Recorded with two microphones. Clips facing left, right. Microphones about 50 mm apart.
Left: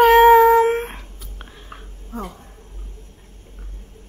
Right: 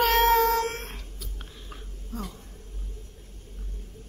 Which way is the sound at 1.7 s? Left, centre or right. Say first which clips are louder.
Left 5 dB; left.